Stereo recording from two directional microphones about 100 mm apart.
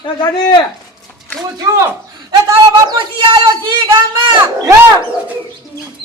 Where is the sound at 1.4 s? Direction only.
35° right (ahead or behind).